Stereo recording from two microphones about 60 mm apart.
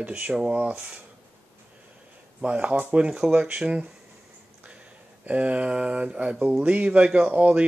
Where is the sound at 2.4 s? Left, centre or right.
Centre.